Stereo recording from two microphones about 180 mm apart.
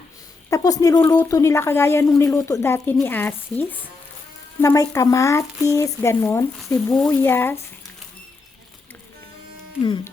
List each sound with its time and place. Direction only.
0.5 s speech: 20° left (ahead or behind)